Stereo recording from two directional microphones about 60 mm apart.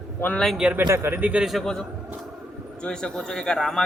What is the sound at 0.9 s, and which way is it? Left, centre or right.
Speech, right.